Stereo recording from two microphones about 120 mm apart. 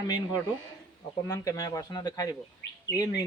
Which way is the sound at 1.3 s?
30° left (ahead or behind).